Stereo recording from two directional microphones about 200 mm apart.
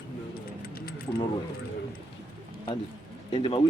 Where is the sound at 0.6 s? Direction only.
50° left (ahead or behind).